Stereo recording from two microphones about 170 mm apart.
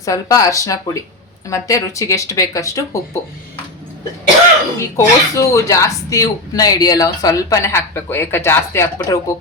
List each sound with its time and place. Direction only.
0.0 s speech: 20° left (ahead or behind)
4.9 s speech: 15° left (ahead or behind)